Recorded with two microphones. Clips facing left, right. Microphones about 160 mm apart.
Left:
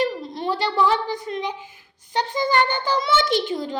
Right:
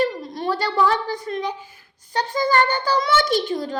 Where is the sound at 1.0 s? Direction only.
20° left (ahead or behind).